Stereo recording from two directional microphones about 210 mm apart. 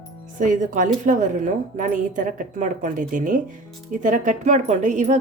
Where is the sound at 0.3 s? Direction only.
40° right (ahead or behind).